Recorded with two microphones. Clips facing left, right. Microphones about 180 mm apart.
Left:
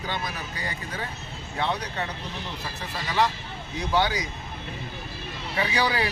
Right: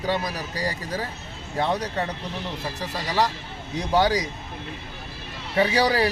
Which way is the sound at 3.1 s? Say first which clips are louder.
Even; 40° right (ahead or behind).